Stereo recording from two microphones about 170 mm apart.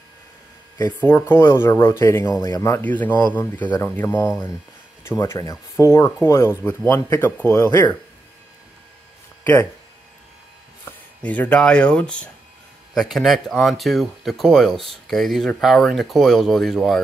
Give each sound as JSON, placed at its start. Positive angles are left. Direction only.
{"t": 0.7, "sound": "speech", "side_deg": 20}
{"t": 9.4, "sound": "speech", "side_deg": 10}
{"t": 10.9, "sound": "speech", "side_deg": 10}